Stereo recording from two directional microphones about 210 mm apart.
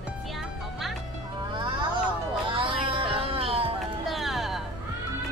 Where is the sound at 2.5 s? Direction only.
25° right (ahead or behind).